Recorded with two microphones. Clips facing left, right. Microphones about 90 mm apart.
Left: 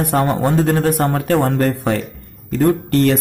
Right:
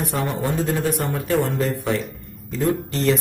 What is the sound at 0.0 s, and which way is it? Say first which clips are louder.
A man's voice: left 7 dB; 60° left (ahead or behind).